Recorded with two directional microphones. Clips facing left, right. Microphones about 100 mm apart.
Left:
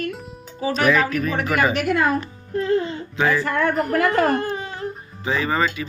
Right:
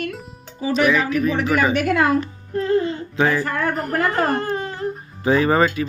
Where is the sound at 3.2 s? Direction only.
35° right (ahead or behind).